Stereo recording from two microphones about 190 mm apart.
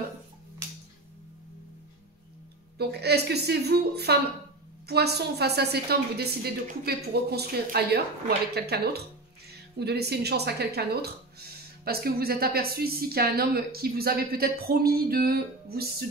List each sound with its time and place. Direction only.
2.8 s a woman's voice: 60° right (ahead or behind)